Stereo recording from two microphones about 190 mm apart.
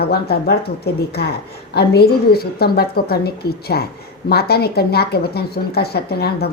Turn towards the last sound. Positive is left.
turn(degrees=55)  # may be behind; listen again after turning